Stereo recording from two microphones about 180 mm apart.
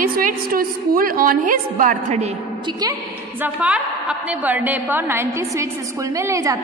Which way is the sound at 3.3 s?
10° right (ahead or behind).